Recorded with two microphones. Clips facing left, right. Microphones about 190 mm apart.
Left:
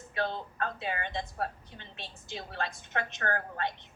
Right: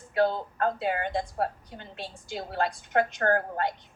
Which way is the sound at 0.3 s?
45° right (ahead or behind).